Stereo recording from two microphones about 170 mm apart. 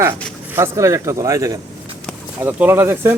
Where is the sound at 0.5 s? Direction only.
15° right (ahead or behind).